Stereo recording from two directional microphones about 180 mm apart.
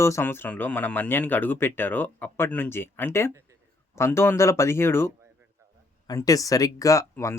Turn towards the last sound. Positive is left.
turn(degrees=15)  # may be behind; listen again after turning